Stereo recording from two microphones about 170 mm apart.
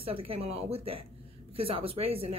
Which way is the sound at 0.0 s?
35° right (ahead or behind).